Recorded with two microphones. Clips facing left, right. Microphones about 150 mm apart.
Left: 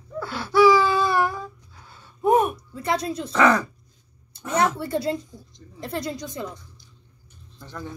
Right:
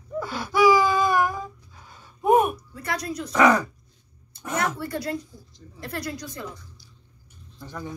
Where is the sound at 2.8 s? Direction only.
25° left (ahead or behind).